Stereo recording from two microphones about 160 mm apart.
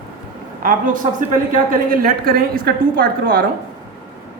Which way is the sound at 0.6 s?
60° right (ahead or behind).